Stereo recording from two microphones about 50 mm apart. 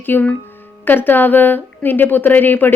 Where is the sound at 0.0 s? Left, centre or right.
Left.